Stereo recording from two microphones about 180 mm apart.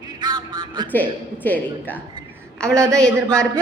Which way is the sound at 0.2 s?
25° right (ahead or behind).